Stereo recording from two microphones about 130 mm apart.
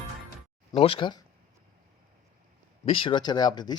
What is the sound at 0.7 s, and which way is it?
Speech, 45° left (ahead or behind).